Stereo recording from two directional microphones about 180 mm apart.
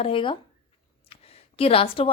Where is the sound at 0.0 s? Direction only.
30° left (ahead or behind).